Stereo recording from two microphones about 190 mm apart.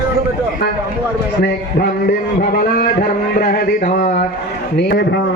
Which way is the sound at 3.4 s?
50° left (ahead or behind).